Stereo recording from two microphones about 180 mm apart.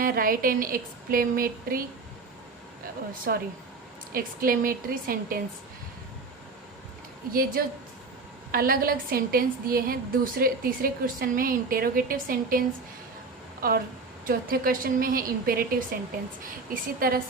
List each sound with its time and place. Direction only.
0.0 s a woman's voice: 50° right (ahead or behind)
3.3 s a woman's voice: 60° right (ahead or behind)
7.3 s a woman's voice: 55° right (ahead or behind)
8.5 s a woman's voice: 55° right (ahead or behind)
17.0 s a woman's voice: 55° right (ahead or behind)